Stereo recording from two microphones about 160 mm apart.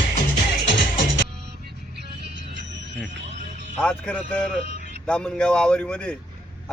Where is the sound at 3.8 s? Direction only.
5° left (ahead or behind).